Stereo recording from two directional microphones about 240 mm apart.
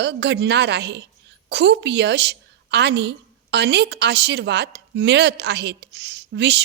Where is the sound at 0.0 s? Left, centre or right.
Right.